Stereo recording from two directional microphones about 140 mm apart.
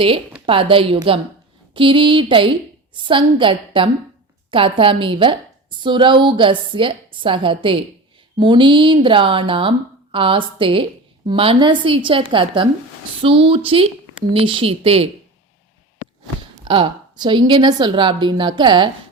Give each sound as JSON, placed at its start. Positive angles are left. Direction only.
{"t": 0.4, "sound": "a woman's voice", "side_deg": -40}
{"t": 16.6, "sound": "a woman's voice", "side_deg": -35}